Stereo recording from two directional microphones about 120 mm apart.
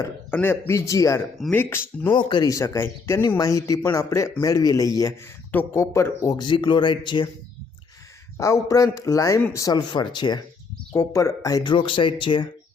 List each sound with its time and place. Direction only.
0.3 s a man's voice: 15° left (ahead or behind)
1.5 s speech: 15° left (ahead or behind)
2.1 s speech: 40° left (ahead or behind)
2.5 s a man's voice: 25° left (ahead or behind)
3.2 s a man's voice: 30° left (ahead or behind)
5.5 s a man's voice: 20° left (ahead or behind)
6.4 s speech: 40° left (ahead or behind)
8.4 s a man's voice: 25° left (ahead or behind)
10.9 s a man's voice: 25° left (ahead or behind)
11.7 s speech: 45° left (ahead or behind)